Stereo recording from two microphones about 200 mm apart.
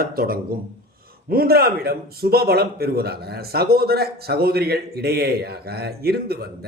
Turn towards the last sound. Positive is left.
turn(degrees=-50)  # may be behind; listen again after turning